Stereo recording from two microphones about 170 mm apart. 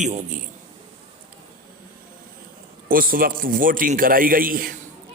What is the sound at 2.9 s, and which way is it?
A man's voice, 55° right (ahead or behind).